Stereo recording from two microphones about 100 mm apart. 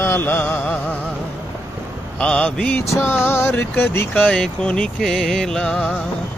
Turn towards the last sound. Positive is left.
turn(degrees=10)  # may be behind; listen again after turning